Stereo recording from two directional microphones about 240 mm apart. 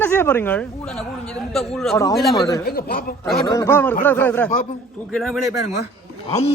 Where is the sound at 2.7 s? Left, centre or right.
Left.